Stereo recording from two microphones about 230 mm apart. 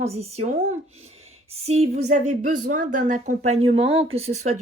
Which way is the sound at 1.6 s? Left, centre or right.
Right.